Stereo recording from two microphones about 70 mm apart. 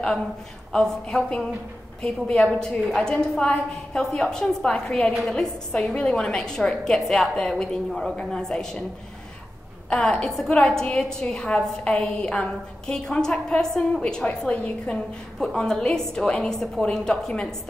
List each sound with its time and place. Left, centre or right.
0.7 s a woman's voice: centre
9.8 s a woman's voice: centre